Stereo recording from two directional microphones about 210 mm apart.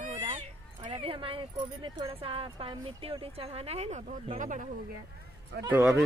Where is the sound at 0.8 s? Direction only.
25° right (ahead or behind).